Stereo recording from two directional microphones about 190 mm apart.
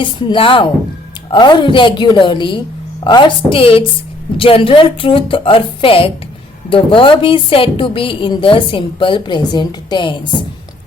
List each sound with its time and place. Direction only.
0.0 s a woman's voice: 25° left (ahead or behind)